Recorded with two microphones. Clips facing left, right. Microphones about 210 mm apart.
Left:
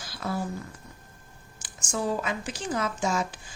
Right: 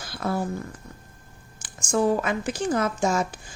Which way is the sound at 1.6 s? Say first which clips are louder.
Right 7 dB; 50° right (ahead or behind).